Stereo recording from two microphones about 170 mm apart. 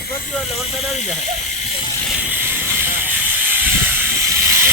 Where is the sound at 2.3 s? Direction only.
10° right (ahead or behind).